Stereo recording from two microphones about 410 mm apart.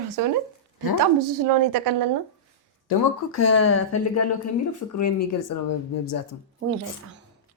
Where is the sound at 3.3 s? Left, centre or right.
Left.